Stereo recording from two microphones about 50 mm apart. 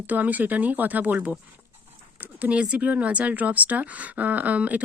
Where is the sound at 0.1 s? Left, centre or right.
Right.